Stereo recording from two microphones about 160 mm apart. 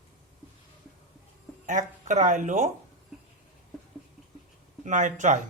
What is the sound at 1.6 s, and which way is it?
Speech, 50° right (ahead or behind).